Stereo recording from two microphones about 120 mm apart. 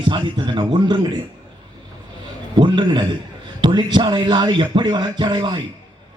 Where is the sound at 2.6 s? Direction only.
40° right (ahead or behind).